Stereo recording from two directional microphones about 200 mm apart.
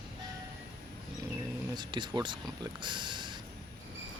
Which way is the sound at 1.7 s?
20° right (ahead or behind).